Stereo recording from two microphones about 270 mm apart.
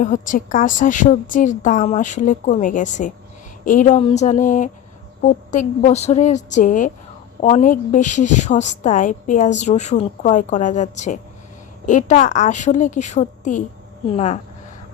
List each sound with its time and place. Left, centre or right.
0.0 s a woman's voice: left